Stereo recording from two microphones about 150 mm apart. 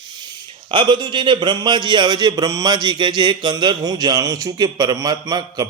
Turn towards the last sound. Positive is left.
turn(degrees=-25)  # may be behind; listen again after turning